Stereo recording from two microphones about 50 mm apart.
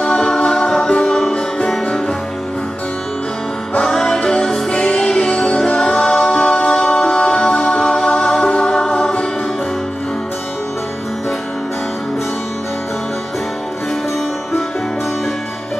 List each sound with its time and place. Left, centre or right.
0.0 s music: centre
3.8 s music: centre